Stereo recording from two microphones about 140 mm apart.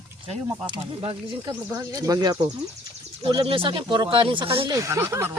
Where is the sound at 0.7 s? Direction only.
40° right (ahead or behind).